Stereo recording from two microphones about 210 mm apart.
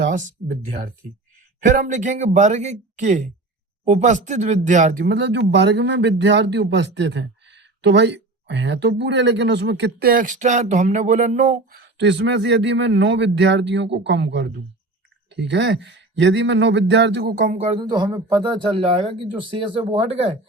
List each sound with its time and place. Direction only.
0.1 s speech: 40° right (ahead or behind)
11.8 s speech: 55° right (ahead or behind); by 20.3 s 30° right (ahead or behind)